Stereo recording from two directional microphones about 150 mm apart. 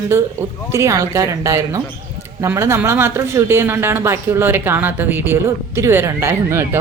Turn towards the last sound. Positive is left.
turn(degrees=-15)  # may be behind; listen again after turning